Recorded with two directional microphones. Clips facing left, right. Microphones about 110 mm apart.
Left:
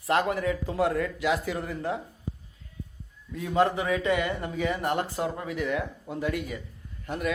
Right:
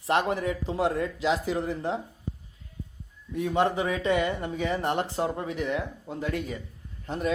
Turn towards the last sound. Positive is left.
turn(degrees=-30)  # may be behind; listen again after turning